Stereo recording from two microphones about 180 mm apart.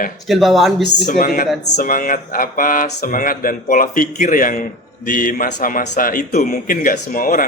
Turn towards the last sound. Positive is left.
turn(degrees=50)  # may be behind; listen again after turning